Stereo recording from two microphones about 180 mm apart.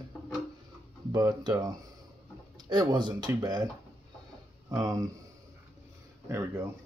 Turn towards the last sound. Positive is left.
turn(degrees=-15)  # may be behind; listen again after turning